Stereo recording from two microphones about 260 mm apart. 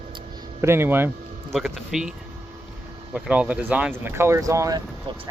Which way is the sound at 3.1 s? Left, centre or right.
Centre.